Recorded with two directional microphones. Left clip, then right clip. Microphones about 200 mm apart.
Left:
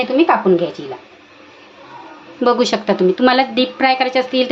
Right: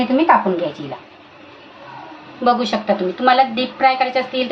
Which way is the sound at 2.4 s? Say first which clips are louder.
Left 2 dB; 50° left (ahead or behind).